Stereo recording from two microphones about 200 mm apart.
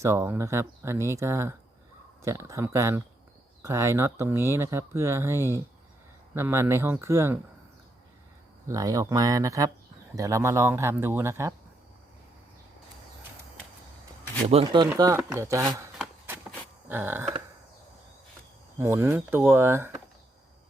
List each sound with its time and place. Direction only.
0.0 s speech: 15° right (ahead or behind)
8.6 s speech: 15° right (ahead or behind)
14.4 s speech: 30° right (ahead or behind)
16.0 s walk: 10° right (ahead or behind)
16.9 s speech: 10° right (ahead or behind)
18.8 s speech: 10° right (ahead or behind)